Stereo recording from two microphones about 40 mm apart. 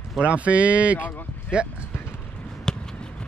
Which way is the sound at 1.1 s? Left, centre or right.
Left.